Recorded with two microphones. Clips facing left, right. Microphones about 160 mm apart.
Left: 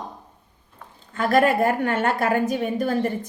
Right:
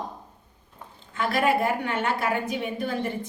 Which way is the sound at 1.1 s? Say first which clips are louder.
Left 5 dB; 45° left (ahead or behind).